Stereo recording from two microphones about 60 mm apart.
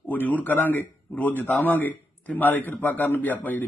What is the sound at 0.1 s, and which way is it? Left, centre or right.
A man's voice, left.